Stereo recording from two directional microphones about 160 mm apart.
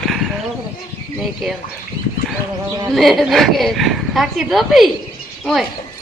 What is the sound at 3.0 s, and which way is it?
Speech, centre (ahead or behind).